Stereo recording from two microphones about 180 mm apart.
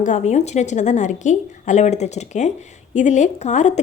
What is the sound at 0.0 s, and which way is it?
A woman's voice, 40° left (ahead or behind).